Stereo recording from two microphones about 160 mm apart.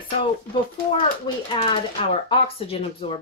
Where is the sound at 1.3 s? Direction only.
25° left (ahead or behind).